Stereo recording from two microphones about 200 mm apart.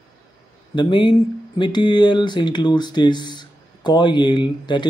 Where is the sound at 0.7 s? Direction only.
25° left (ahead or behind).